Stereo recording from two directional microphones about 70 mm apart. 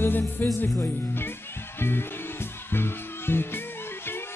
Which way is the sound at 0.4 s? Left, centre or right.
Left.